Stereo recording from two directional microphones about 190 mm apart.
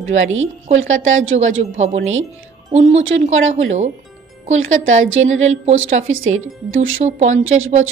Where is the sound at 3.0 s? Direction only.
90° right.